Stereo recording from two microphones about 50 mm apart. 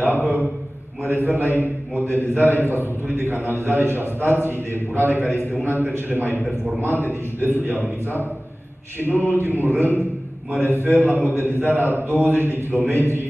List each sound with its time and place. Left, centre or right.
0.1 s a man's voice: right